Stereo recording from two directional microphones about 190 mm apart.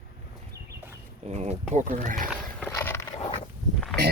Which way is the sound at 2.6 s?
10° left (ahead or behind).